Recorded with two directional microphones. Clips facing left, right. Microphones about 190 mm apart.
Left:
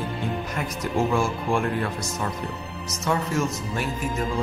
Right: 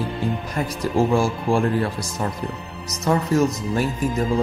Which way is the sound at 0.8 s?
30° right (ahead or behind).